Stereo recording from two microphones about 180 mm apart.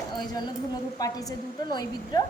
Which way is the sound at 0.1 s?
25° left (ahead or behind).